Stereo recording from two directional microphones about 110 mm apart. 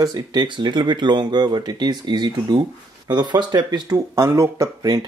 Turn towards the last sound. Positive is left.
turn(degrees=-30)  # may be behind; listen again after turning